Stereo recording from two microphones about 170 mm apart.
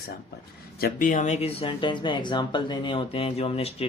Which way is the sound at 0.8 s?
55° left (ahead or behind).